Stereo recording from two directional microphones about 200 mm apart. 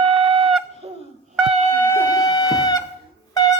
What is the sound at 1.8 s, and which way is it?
Wind instrument, 10° left (ahead or behind).